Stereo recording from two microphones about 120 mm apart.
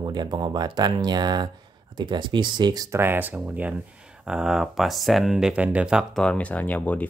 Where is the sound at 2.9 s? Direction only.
20° right (ahead or behind).